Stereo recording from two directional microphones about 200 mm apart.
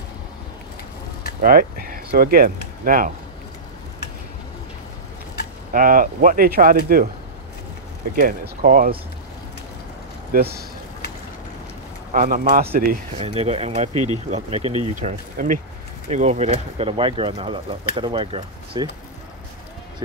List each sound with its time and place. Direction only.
1.4 s speech: 45° right (ahead or behind)
5.7 s speech: 45° right (ahead or behind)
8.2 s speech: 45° right (ahead or behind)
10.3 s speech: 50° right (ahead or behind)
12.1 s speech: 40° right (ahead or behind)
13.2 s speech: 30° right (ahead or behind)